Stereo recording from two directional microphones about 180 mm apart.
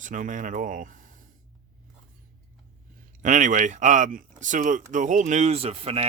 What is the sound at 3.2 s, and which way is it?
Speech, 45° right (ahead or behind).